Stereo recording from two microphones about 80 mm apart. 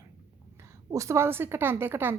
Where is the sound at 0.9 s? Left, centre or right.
Right.